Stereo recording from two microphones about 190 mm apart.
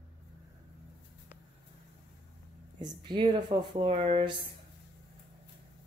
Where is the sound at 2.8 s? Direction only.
25° right (ahead or behind).